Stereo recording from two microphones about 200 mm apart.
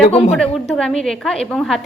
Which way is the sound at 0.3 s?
Centre (ahead or behind).